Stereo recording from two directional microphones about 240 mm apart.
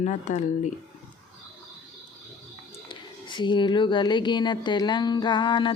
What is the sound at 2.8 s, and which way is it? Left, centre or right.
Speech, centre.